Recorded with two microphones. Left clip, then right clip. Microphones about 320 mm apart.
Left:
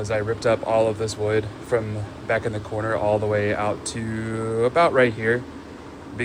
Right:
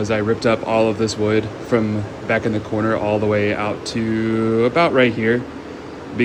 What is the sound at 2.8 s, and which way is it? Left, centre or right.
Speech, right.